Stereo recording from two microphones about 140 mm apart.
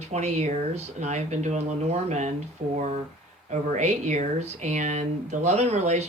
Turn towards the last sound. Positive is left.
turn(degrees=-55)  # may be behind; listen again after turning